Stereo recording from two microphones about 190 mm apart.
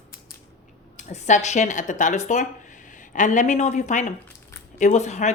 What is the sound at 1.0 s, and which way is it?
Speech, 40° left (ahead or behind).